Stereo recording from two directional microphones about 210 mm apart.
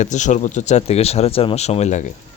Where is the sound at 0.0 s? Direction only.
35° left (ahead or behind).